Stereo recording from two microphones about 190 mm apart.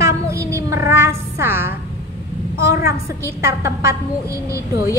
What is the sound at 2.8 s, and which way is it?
A woman's voice, 15° right (ahead or behind).